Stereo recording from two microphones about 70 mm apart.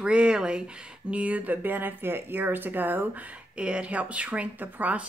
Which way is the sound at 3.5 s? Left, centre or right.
Centre.